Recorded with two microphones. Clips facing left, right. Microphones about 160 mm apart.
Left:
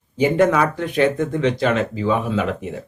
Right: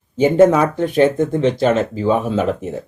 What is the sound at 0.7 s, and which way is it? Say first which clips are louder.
Speech: right 4 dB; 40° right (ahead or behind).